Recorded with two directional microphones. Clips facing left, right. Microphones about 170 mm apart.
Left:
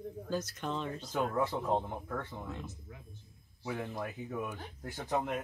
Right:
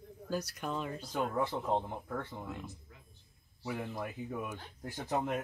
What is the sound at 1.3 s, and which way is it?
Speech, 5° left (ahead or behind).